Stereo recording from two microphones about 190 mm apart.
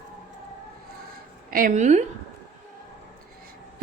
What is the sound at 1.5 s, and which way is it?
Speech, 45° right (ahead or behind).